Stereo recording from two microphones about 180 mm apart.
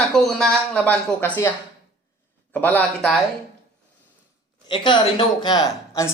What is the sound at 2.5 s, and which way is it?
Speech, 10° left (ahead or behind).